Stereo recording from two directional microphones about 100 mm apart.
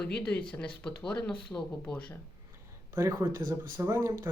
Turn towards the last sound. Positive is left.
turn(degrees=-25)  # may be behind; listen again after turning